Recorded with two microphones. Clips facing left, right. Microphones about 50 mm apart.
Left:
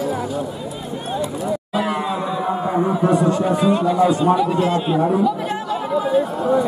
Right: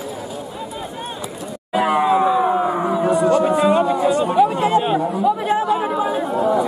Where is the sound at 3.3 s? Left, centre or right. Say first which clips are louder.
Right 2 dB; right.